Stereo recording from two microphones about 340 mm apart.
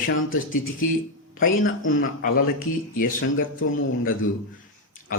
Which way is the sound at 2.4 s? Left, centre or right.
Left.